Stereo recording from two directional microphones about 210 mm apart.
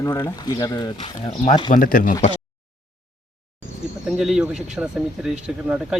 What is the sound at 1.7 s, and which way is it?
Speech, 40° left (ahead or behind).